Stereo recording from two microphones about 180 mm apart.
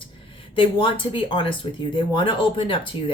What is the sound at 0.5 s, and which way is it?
Speech, 30° left (ahead or behind).